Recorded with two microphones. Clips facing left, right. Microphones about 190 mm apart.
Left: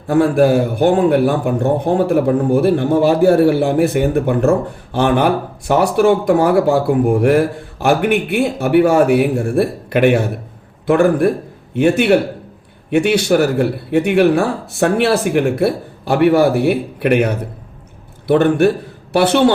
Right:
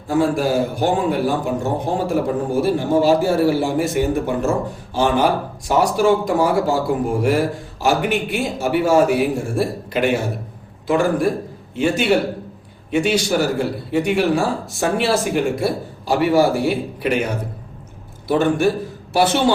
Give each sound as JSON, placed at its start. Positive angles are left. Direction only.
{"t": 0.1, "sound": "a man's voice", "side_deg": 60}
{"t": 18.3, "sound": "a man's voice", "side_deg": 60}